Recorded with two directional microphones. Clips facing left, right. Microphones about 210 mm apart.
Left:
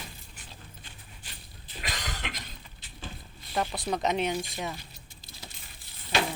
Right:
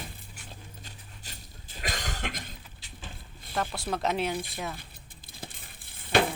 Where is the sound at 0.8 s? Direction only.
40° right (ahead or behind).